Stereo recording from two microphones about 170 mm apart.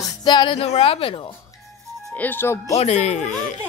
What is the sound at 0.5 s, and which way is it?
Speech, 35° left (ahead or behind).